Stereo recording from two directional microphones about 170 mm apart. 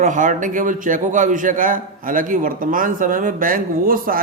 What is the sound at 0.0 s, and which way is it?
A man's voice, 50° right (ahead or behind).